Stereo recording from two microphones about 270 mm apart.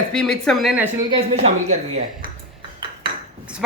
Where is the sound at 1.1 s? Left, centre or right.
Right.